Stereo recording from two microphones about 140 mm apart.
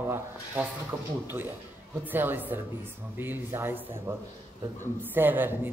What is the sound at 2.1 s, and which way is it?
Speech, 15° right (ahead or behind).